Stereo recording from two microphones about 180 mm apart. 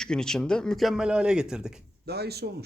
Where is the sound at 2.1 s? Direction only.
65° right (ahead or behind).